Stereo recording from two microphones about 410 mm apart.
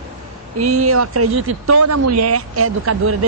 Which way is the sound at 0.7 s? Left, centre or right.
Right.